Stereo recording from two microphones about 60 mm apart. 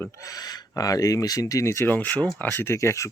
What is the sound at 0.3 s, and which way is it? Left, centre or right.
Speech, left.